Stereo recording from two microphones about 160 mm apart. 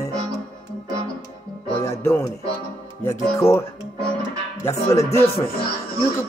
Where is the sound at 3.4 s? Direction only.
20° left (ahead or behind).